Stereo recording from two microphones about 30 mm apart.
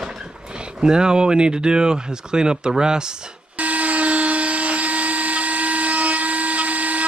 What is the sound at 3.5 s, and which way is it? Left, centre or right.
Wood, right.